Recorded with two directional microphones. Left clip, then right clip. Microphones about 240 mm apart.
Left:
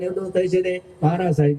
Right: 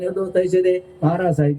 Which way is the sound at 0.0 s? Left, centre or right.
Right.